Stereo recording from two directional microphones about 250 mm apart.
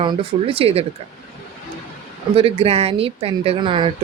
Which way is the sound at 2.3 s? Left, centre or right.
Right.